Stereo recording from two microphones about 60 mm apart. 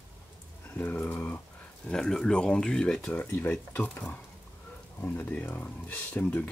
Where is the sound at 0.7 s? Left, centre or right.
Left.